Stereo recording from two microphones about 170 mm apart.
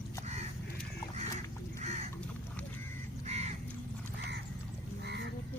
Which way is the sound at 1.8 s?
40° right (ahead or behind).